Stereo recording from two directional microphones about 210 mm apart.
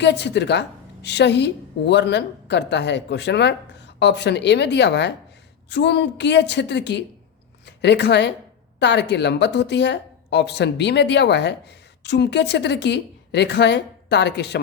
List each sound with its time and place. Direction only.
0.0 s a woman's voice: 55° left (ahead or behind)